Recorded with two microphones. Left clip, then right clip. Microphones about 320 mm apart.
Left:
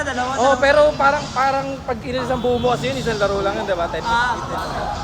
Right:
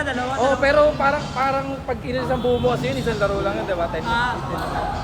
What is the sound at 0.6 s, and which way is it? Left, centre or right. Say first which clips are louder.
A woman's voice: left 2 dB; left.